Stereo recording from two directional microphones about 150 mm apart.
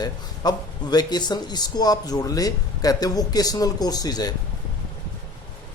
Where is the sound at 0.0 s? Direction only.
25° left (ahead or behind).